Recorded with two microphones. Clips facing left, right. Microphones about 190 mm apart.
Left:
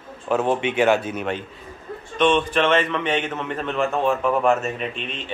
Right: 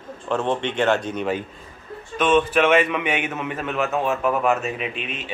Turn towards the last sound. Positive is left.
turn(degrees=-5)  # may be behind; listen again after turning